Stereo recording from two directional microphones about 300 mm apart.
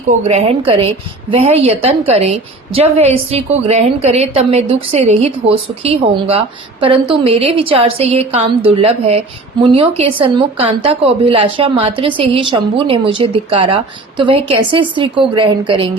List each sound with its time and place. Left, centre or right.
0.3 s a woman's voice: centre